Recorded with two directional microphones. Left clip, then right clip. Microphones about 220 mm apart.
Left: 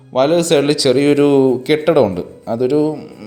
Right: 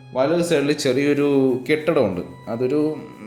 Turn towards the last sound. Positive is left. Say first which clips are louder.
# left 6 dB
turn(degrees=25)  # may be behind; listen again after turning